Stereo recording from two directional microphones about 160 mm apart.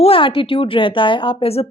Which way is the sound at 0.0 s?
35° left (ahead or behind).